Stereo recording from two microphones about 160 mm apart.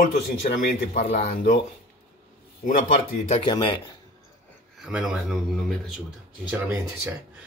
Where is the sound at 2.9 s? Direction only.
30° left (ahead or behind).